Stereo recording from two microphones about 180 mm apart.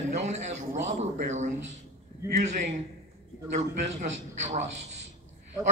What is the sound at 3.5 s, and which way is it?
A man's voice, 40° right (ahead or behind).